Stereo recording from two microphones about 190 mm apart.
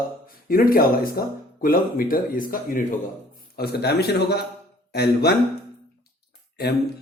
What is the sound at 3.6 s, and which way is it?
A man's voice, 60° left (ahead or behind).